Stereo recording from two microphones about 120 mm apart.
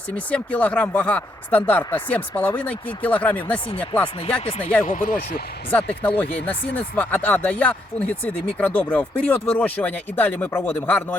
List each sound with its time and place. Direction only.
0.3 s speech: 10° left (ahead or behind)
4.4 s speech: 55° left (ahead or behind)
4.8 s speech: 90° left
5.7 s speech: 15° left (ahead or behind)